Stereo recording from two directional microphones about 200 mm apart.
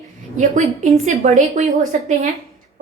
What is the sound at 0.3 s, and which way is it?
A woman's voice, 40° right (ahead or behind).